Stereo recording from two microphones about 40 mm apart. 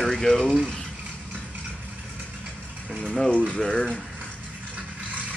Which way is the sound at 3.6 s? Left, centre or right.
Centre.